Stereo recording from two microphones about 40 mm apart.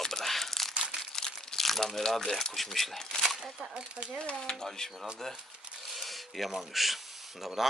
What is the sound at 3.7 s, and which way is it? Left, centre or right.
Speech, right.